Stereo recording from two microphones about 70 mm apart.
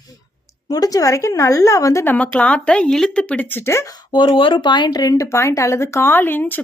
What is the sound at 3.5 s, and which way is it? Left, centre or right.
Speech, left.